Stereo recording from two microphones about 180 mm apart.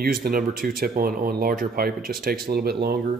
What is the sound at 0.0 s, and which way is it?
Speech, 55° right (ahead or behind).